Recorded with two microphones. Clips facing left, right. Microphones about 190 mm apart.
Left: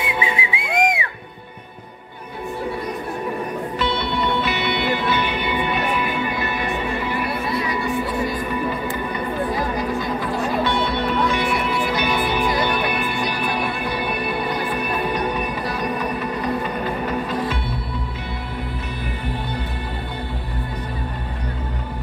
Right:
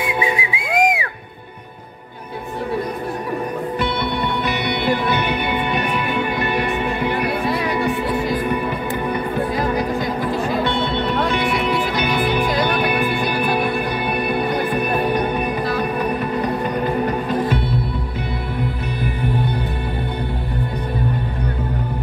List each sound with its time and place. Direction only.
0.0 s music: 25° left (ahead or behind)
4.6 s music: 50° right (ahead or behind); by 7.9 s 70° right (ahead or behind)
11.1 s music: 60° right (ahead or behind)